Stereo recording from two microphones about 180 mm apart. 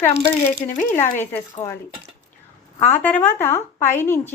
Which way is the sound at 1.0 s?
40° left (ahead or behind).